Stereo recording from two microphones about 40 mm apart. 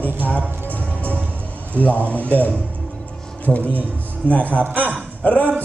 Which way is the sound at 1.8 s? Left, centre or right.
Left.